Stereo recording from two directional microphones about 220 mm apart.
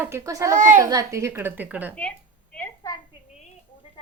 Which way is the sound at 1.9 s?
5° left (ahead or behind).